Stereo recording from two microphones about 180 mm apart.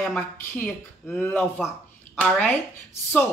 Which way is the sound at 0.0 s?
5° left (ahead or behind).